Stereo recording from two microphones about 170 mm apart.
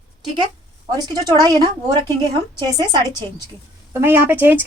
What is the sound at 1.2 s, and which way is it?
A woman's voice, 20° right (ahead or behind).